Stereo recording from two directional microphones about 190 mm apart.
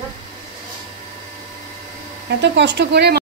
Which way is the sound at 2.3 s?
65° right (ahead or behind).